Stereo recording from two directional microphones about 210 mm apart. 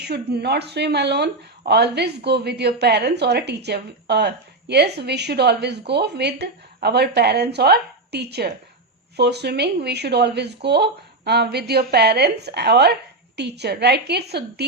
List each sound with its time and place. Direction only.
0.0 s speech: 50° right (ahead or behind)